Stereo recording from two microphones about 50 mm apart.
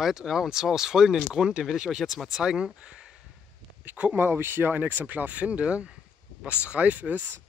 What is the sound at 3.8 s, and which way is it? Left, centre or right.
Speech, right.